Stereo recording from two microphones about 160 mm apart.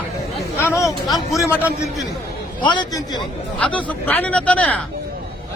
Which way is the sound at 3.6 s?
10° left (ahead or behind).